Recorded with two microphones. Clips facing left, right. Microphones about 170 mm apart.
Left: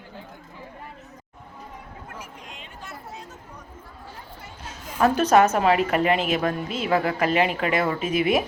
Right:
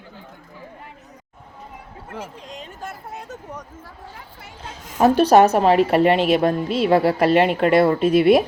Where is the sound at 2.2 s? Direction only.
35° right (ahead or behind); by 3.9 s 80° right.